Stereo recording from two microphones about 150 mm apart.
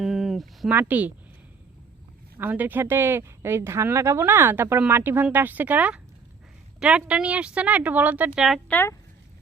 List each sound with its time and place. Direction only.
0.0 s a sound: centre (ahead or behind)
0.7 s speech: 10° right (ahead or behind)
2.4 s speech: 10° right (ahead or behind)
8.7 s speech: 15° left (ahead or behind)